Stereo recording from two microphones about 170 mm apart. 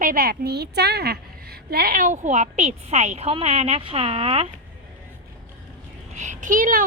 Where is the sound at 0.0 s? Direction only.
60° right (ahead or behind); by 4.4 s 35° right (ahead or behind).